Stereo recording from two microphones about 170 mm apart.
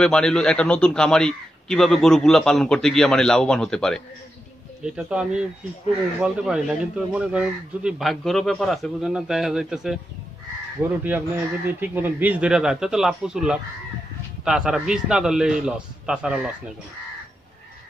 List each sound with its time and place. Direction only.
0.0 s a man's voice: 5° left (ahead or behind)